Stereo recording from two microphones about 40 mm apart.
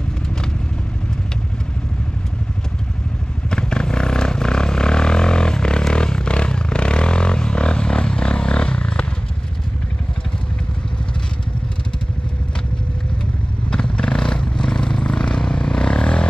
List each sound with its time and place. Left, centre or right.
3.4 s vehicle: centre
13.7 s vehicle: left